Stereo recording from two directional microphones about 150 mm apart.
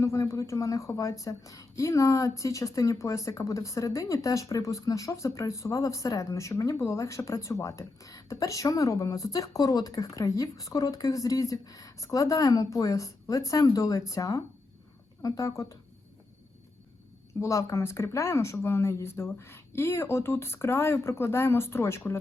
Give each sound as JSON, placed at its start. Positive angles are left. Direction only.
{"t": 0.0, "sound": "a woman's voice", "side_deg": 20}
{"t": 17.4, "sound": "speech", "side_deg": 20}